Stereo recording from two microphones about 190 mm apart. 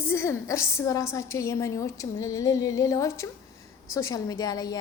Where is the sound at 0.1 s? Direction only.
15° left (ahead or behind).